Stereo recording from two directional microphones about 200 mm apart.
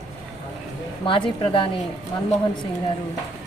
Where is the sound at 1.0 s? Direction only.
25° left (ahead or behind).